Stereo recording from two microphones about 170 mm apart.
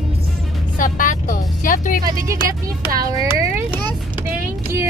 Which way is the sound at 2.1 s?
20° right (ahead or behind).